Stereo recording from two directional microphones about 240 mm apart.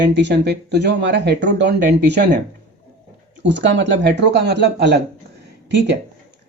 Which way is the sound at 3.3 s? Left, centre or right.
Right.